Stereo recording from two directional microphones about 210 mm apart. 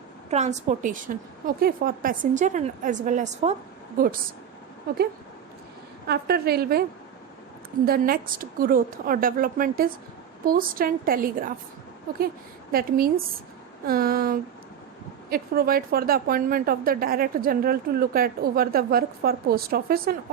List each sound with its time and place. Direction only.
0.3 s a woman's voice: 35° right (ahead or behind)
4.9 s a woman's voice: 45° right (ahead or behind)
6.1 s a woman's voice: 50° right (ahead or behind)
7.9 s a woman's voice: 45° right (ahead or behind)
12.7 s a woman's voice: 45° right (ahead or behind)